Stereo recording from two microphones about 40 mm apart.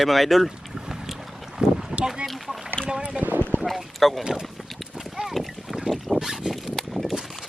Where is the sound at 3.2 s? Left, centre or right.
Right.